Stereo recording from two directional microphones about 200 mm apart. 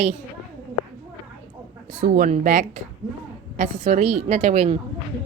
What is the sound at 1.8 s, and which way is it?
Speech, 45° right (ahead or behind).